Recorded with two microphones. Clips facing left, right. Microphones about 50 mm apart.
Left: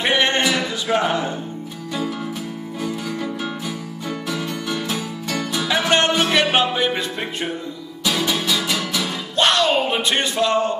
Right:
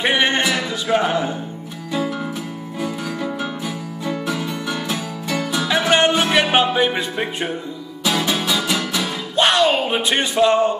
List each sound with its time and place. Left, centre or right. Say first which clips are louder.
0.0 s music: right 1 dB; centre
2.8 s music: right 1 dB; centre